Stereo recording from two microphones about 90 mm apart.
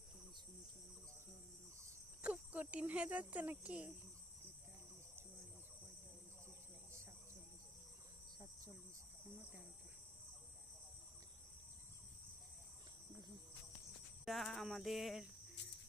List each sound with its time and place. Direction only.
2.2 s speech: 15° right (ahead or behind)
14.3 s speech: centre (ahead or behind)